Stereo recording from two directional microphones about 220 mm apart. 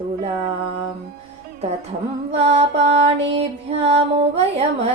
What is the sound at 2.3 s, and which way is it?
Music, 30° right (ahead or behind).